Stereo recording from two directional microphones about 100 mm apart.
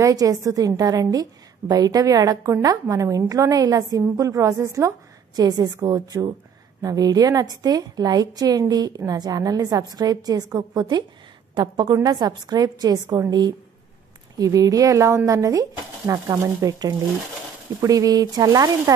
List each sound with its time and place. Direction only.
0.0 s a woman's voice: 35° right (ahead or behind)